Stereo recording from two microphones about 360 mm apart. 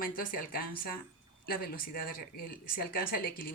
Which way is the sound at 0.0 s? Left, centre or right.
Left.